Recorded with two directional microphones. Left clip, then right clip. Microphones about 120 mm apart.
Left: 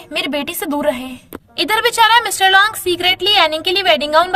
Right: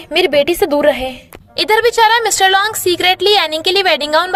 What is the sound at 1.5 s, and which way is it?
A woman's voice, 45° right (ahead or behind).